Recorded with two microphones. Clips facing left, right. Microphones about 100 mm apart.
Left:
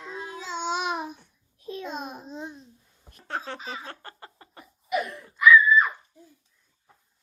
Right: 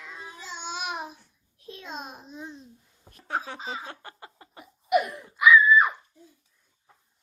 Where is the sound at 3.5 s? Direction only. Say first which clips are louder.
Right 1 dB; 20° right (ahead or behind).